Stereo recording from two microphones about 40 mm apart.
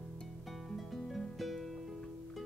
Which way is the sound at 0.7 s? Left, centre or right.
Centre.